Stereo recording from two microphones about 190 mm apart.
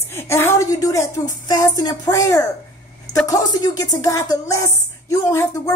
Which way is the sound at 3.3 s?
20° left (ahead or behind).